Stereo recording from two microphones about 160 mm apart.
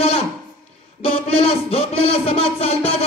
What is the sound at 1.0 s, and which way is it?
Music, 35° left (ahead or behind).